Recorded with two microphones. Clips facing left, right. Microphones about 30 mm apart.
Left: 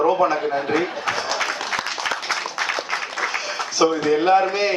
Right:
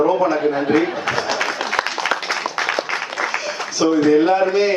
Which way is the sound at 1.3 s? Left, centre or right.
Centre.